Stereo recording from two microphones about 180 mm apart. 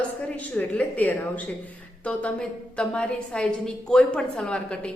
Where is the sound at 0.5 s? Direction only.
10° left (ahead or behind).